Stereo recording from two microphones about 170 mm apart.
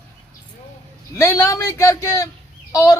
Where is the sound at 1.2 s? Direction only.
15° left (ahead or behind).